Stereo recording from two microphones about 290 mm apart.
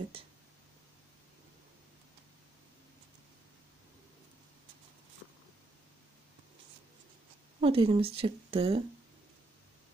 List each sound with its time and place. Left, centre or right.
0.1 s speech: centre
7.6 s speech: centre